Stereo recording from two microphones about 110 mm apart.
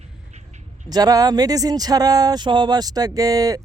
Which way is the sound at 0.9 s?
35° right (ahead or behind).